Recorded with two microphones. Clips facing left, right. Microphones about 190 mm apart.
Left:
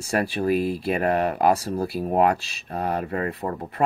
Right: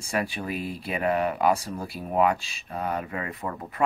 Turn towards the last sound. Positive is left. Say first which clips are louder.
# left 3 dB
turn(degrees=35)  # may be behind; listen again after turning